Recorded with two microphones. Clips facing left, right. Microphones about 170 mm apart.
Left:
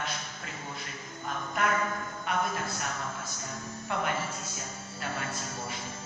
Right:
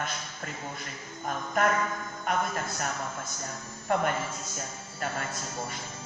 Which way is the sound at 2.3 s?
45° right (ahead or behind).